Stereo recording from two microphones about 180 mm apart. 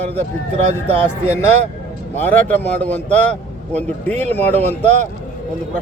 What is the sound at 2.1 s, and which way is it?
Speech, 10° left (ahead or behind).